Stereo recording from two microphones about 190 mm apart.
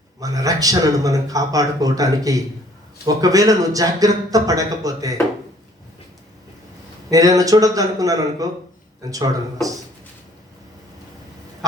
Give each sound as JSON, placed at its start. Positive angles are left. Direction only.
{"t": 0.2, "sound": "speech", "side_deg": -20}
{"t": 7.1, "sound": "speech", "side_deg": -20}